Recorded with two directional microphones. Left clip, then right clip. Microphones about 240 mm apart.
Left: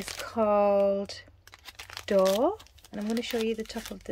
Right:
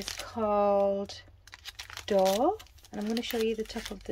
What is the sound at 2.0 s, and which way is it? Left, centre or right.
Speech, centre.